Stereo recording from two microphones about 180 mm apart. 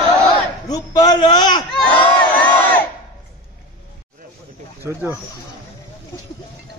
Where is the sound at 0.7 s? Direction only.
20° left (ahead or behind).